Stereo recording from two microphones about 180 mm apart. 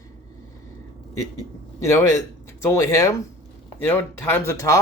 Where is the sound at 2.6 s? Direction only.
15° left (ahead or behind).